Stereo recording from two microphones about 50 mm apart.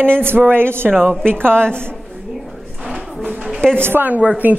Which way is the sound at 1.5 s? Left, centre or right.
Centre.